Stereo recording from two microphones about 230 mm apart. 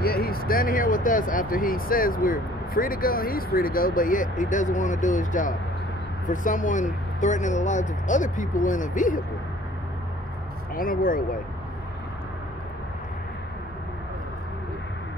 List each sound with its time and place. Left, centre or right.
0.0 s speech: left
10.7 s speech: left